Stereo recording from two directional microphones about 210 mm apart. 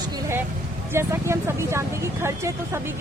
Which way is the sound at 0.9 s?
15° right (ahead or behind).